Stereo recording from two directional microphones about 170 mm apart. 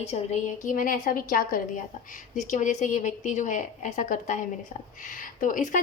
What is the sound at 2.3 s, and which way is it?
Speech, 45° left (ahead or behind).